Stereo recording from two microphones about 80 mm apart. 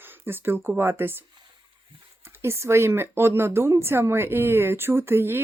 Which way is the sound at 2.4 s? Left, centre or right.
Right.